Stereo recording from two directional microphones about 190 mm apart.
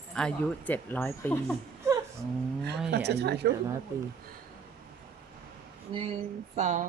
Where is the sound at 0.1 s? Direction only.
5° left (ahead or behind).